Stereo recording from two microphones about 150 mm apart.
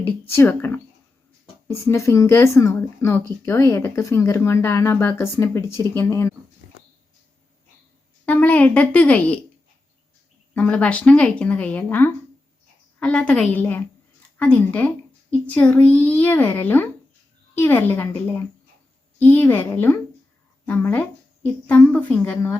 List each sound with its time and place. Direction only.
0.3 s speech: 15° left (ahead or behind)
8.2 s speech: 10° left (ahead or behind)
10.5 s speech: 10° left (ahead or behind)